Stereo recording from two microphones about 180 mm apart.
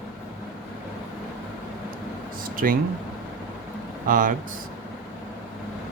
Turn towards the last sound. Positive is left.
turn(degrees=-50)  # may be behind; listen again after turning